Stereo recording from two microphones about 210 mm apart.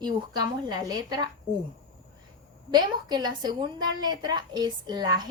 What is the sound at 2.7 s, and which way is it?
A woman's voice, 20° right (ahead or behind).